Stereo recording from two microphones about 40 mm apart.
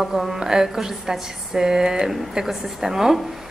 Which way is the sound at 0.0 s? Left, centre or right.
Centre.